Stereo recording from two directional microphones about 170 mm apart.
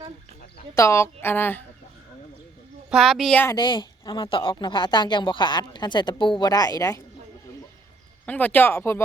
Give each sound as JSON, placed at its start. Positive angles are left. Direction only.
{"t": 0.8, "sound": "a woman's voice", "side_deg": 15}
{"t": 2.9, "sound": "a woman's voice", "side_deg": 0}
{"t": 3.4, "sound": "a woman's voice", "side_deg": 25}
{"t": 8.3, "sound": "a woman's voice", "side_deg": 10}